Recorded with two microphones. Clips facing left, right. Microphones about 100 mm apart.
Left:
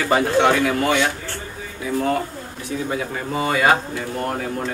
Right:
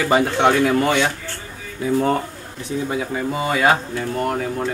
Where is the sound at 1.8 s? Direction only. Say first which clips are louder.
Right 3 dB; 30° right (ahead or behind).